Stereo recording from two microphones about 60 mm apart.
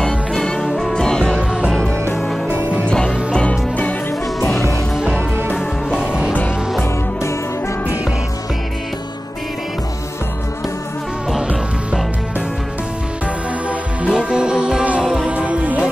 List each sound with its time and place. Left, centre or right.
0.0 s music: centre
2.9 s music: centre
11.4 s music: centre
14.0 s music: centre